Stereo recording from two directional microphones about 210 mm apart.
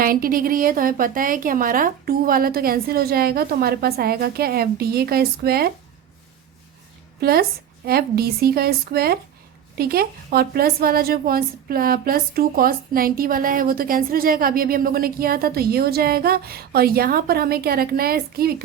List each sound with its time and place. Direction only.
0.0 s a woman's voice: 45° right (ahead or behind)
7.2 s a woman's voice: 45° right (ahead or behind)